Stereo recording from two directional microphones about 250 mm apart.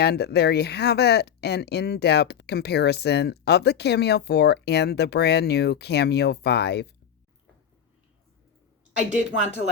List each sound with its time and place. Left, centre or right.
0.0 s speech: left
9.0 s a woman's voice: right